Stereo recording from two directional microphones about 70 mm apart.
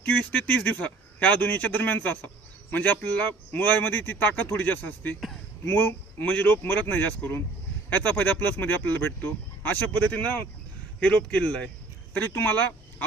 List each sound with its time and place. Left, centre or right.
0.0 s speech: centre
11.0 s speech: centre
12.1 s speech: left